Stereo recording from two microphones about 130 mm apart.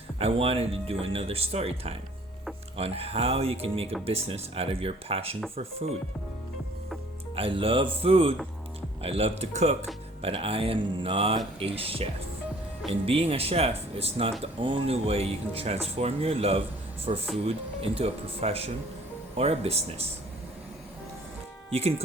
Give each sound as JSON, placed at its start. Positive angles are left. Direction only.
{"t": 0.2, "sound": "speech", "side_deg": -50}
{"t": 7.3, "sound": "speech", "side_deg": -45}
{"t": 21.7, "sound": "speech", "side_deg": -50}